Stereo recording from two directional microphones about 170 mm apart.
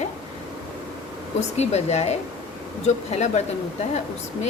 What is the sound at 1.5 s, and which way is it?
Speech, 40° left (ahead or behind).